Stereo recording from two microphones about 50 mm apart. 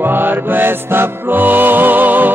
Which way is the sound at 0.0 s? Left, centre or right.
Right.